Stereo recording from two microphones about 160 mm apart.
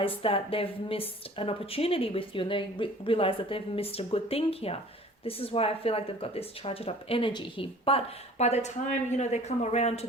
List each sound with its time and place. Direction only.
0.0 s speech: 35° left (ahead or behind)